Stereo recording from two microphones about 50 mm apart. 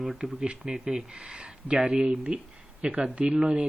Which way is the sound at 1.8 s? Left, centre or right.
Centre.